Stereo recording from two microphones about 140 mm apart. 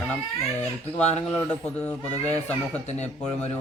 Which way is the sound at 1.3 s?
10° left (ahead or behind).